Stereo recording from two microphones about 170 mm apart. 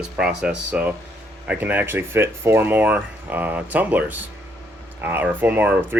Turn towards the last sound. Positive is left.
turn(degrees=-10)  # may be behind; listen again after turning